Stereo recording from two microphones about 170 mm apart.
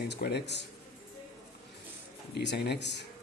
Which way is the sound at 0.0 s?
70° left (ahead or behind).